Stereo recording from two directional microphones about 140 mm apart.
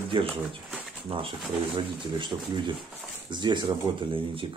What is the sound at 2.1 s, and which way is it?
Speech, 35° right (ahead or behind).